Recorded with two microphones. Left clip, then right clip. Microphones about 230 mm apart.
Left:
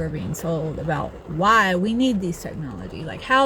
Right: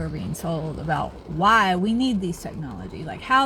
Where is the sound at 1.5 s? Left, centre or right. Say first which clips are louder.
Left 1 dB; centre.